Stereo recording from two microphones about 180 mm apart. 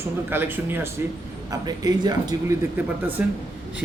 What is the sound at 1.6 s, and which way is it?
Speech, 20° right (ahead or behind).